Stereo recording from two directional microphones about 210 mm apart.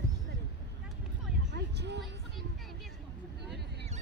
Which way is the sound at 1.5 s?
55° right (ahead or behind).